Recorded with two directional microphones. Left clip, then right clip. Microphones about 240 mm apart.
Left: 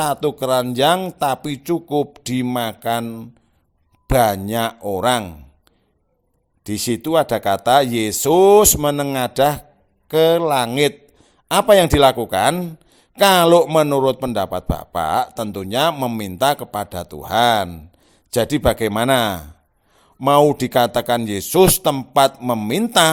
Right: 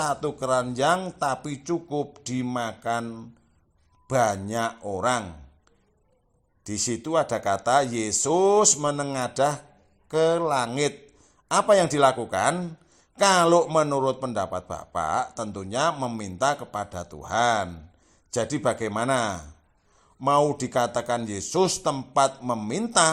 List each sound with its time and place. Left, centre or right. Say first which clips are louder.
0.0 s a man's voice: left 7 dB; left
6.7 s a man's voice: left 7 dB; left